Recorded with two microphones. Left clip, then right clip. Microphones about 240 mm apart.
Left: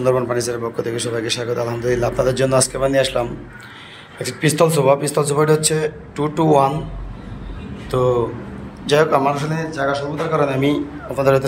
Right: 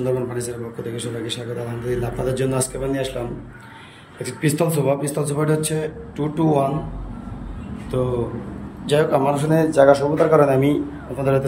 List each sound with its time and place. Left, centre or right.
0.0 s a man's voice: centre
4.2 s a man's voice: centre
7.9 s a man's voice: centre